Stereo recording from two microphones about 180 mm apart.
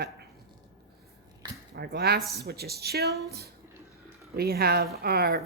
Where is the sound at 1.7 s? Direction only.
65° right (ahead or behind).